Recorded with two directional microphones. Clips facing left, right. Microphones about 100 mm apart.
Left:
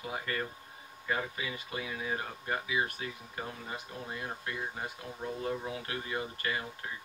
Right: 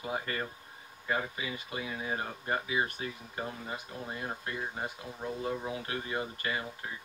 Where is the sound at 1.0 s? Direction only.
25° right (ahead or behind).